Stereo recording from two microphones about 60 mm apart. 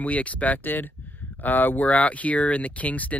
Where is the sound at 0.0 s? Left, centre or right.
Left.